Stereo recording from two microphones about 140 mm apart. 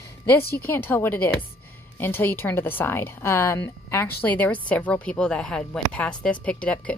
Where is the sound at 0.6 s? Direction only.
15° left (ahead or behind).